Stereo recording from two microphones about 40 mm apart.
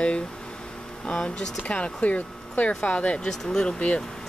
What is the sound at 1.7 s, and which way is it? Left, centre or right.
Speech, left.